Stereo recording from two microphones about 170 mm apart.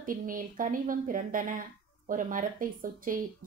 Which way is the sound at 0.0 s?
55° right (ahead or behind).